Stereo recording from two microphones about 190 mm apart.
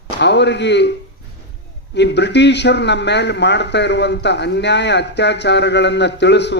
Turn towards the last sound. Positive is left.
turn(degrees=65)  # may be behind; listen again after turning